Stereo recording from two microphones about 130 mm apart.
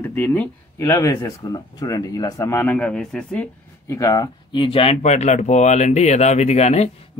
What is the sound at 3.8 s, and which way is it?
Speech, 25° left (ahead or behind).